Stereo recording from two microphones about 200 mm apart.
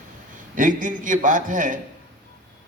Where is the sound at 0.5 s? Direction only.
40° right (ahead or behind).